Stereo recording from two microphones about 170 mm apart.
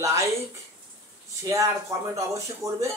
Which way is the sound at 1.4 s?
20° right (ahead or behind).